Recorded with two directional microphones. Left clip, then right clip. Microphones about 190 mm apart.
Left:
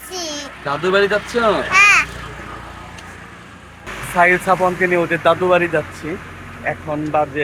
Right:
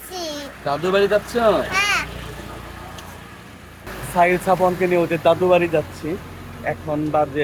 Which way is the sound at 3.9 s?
35° right (ahead or behind).